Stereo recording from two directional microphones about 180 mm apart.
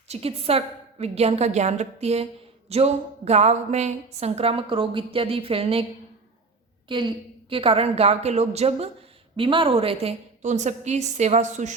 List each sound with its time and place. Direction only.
0.1 s speech: 35° right (ahead or behind)
6.8 s a woman's voice: 25° right (ahead or behind); by 11.7 s 40° right (ahead or behind)